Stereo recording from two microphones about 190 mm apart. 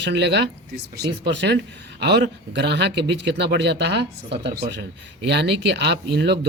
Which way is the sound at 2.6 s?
65° right (ahead or behind).